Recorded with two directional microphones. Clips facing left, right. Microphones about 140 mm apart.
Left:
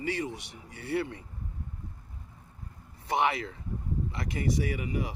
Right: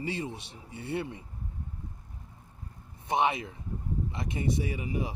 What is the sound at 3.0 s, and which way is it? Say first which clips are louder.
Speech: even; 20° right (ahead or behind).